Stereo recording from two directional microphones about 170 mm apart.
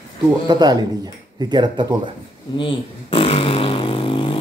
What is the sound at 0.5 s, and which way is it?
Speech, 25° right (ahead or behind).